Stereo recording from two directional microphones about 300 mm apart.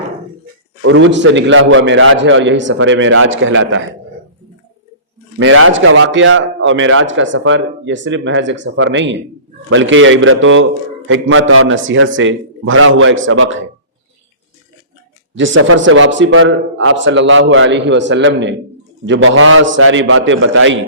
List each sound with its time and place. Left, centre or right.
0.8 s a man's voice: right
5.4 s a man's voice: right
15.4 s a man's voice: right